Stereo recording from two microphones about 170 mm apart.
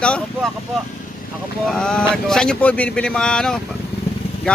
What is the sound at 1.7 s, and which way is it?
Speech, 5° left (ahead or behind).